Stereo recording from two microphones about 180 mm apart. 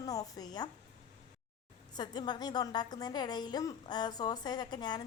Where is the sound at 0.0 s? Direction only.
20° left (ahead or behind).